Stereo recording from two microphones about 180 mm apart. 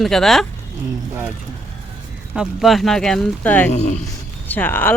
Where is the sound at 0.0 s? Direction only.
Centre (ahead or behind).